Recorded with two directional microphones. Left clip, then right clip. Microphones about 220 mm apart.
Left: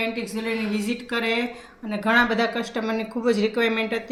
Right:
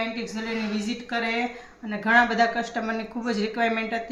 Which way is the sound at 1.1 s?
5° right (ahead or behind).